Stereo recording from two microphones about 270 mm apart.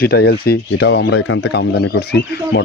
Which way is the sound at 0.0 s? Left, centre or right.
Left.